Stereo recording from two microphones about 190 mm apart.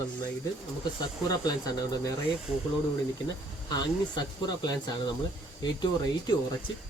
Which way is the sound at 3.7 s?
20° left (ahead or behind).